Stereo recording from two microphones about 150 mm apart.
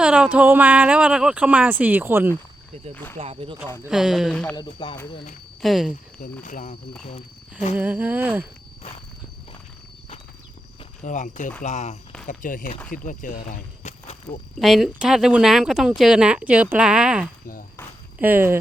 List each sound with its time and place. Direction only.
0.0 s speech: 5° right (ahead or behind)
2.9 s speech: 15° left (ahead or behind)
3.2 s speech: 40° right (ahead or behind)
3.8 s speech: 5° right (ahead or behind)
4.3 s speech: 10° left (ahead or behind)
4.5 s speech: 30° left (ahead or behind)
5.6 s speech: centre (ahead or behind)
6.4 s speech: 60° left (ahead or behind)
7.8 s speech: 10° right (ahead or behind)
11.0 s speech: 55° left (ahead or behind)
12.2 s speech: 60° left (ahead or behind)
14.6 s speech: centre (ahead or behind)
17.4 s speech: 70° left (ahead or behind)
18.2 s speech: 15° right (ahead or behind)